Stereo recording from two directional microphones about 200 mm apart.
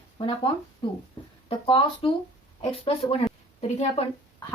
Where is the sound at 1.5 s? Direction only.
25° left (ahead or behind).